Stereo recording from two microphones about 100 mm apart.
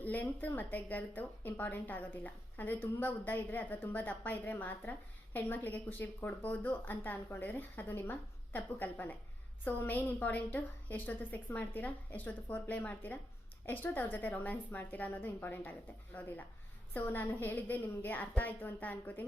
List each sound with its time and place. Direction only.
0.0 s a woman's voice: 15° left (ahead or behind)